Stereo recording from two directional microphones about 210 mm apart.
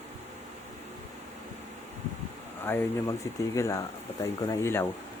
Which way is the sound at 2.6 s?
10° left (ahead or behind).